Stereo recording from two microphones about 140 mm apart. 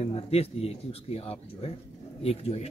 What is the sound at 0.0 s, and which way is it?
Speech, 45° left (ahead or behind).